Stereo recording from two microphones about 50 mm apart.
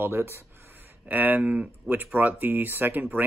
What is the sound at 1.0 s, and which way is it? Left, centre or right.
Speech, right.